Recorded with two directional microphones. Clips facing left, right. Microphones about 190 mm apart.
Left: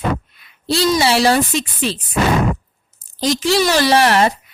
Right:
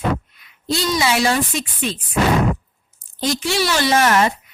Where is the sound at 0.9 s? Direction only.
35° left (ahead or behind).